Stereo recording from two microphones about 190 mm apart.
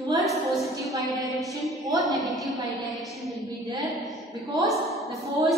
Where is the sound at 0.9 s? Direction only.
20° right (ahead or behind).